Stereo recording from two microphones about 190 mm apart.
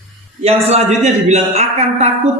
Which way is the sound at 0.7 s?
35° right (ahead or behind).